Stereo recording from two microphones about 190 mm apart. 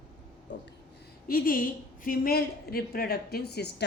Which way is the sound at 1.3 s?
50° left (ahead or behind).